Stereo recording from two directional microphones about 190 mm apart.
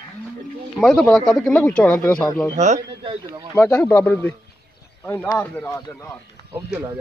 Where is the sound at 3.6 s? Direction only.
5° left (ahead or behind).